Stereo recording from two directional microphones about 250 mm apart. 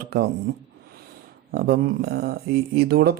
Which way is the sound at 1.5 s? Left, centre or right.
Right.